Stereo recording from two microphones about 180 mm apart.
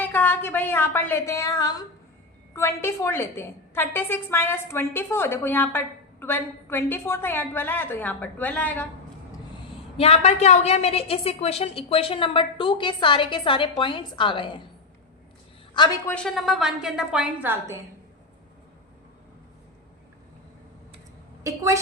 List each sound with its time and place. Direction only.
0.0 s a woman's voice: 10° left (ahead or behind)
10.0 s a woman's voice: 35° left (ahead or behind)
15.7 s a woman's voice: 25° left (ahead or behind)
16.0 s a woman's voice: 5° left (ahead or behind)
21.4 s a woman's voice: 15° right (ahead or behind)